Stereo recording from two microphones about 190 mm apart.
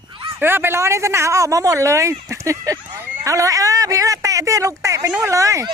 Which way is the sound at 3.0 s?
15° right (ahead or behind).